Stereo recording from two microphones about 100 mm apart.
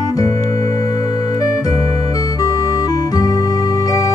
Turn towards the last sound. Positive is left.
turn(degrees=40)  # may be behind; listen again after turning